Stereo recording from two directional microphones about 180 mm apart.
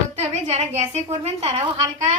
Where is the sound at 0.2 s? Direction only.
35° right (ahead or behind).